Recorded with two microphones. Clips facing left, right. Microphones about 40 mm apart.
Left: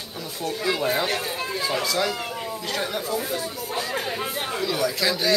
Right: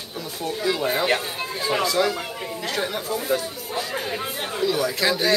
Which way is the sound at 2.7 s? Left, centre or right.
Centre.